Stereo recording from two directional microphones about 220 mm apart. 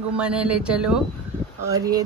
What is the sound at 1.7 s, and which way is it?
Speech, 15° right (ahead or behind).